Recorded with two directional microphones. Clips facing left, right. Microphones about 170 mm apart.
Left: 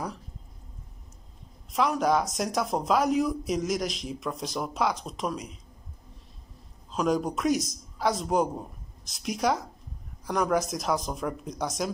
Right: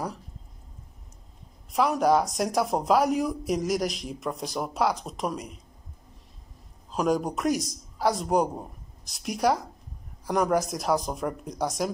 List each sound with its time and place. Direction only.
1.7 s speech: 5° right (ahead or behind)
6.9 s a man's voice: 5° right (ahead or behind)